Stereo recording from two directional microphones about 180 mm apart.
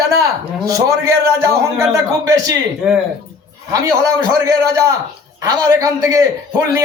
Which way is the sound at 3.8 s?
20° right (ahead or behind).